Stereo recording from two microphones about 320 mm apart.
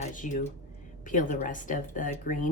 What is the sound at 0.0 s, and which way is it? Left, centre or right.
Speech, left.